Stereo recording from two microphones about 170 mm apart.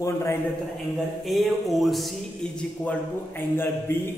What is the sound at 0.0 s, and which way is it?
Speech, 15° left (ahead or behind).